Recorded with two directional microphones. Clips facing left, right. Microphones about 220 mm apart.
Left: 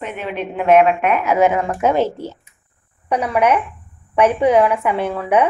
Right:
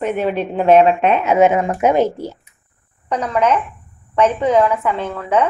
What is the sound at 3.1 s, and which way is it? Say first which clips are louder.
A woman's voice: left 1 dB; 10° left (ahead or behind).